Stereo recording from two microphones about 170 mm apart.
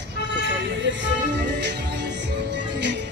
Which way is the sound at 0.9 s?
90° right.